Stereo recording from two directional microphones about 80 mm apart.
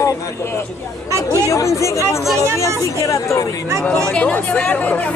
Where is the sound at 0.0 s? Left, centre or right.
Left.